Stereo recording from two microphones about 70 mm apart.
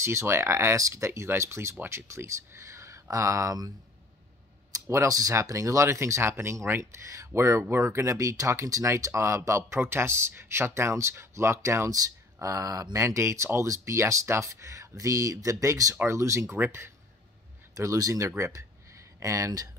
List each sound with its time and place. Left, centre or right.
0.0 s speech: right
5.0 s speech: right
5.3 s speech: right
16.5 s speech: right
17.7 s speech: right
18.4 s a sound: right